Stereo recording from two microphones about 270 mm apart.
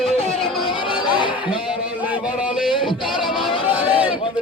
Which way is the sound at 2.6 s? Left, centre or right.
Centre.